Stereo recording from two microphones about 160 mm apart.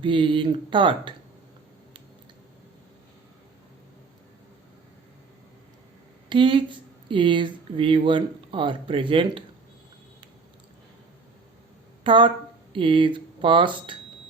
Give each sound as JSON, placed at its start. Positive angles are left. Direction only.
{"t": 0.0, "sound": "speech", "side_deg": -30}
{"t": 6.2, "sound": "speech", "side_deg": -30}
{"t": 12.0, "sound": "speech", "side_deg": -30}